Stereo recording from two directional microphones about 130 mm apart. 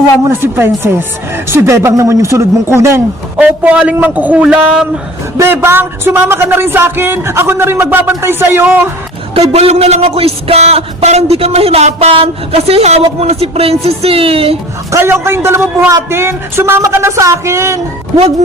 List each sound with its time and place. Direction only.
0.3 s a man's voice: 15° right (ahead or behind)
3.3 s speech: 10° right (ahead or behind)
5.4 s speech: 15° right (ahead or behind)
9.3 s a man's voice: 50° right (ahead or behind)
14.9 s a man's voice: 20° right (ahead or behind)